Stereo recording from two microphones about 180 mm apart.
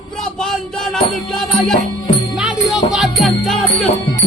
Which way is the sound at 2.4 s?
Centre (ahead or behind).